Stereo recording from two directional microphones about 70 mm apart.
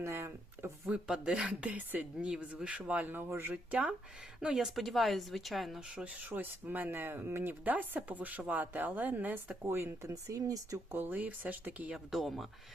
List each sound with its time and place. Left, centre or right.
0.0 s speech: right
0.9 s a woman's voice: centre; by 3.5 s right
3.5 s a woman's voice: centre
4.4 s a woman's voice: centre
6.1 s a woman's voice: right
9.6 s speech: right
10.9 s a woman's voice: right
12.1 s a woman's voice: centre